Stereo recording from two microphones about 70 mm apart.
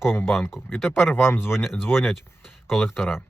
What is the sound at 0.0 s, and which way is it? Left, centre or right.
Speech, left.